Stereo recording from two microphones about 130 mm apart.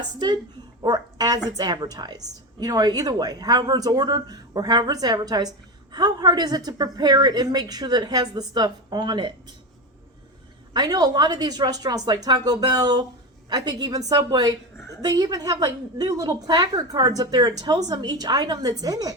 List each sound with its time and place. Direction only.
0.8 s a sound: 30° right (ahead or behind)
1.5 s a woman's voice: 30° right (ahead or behind)
10.8 s a woman's voice: 30° right (ahead or behind)